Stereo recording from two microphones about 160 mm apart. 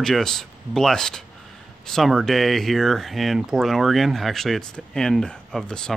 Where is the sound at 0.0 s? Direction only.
Centre (ahead or behind).